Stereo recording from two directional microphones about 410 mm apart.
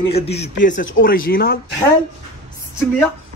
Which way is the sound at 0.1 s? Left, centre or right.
Centre.